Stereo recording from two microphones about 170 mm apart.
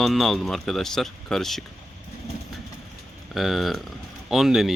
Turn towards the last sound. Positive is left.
turn(degrees=0)  # may be behind; listen again after turning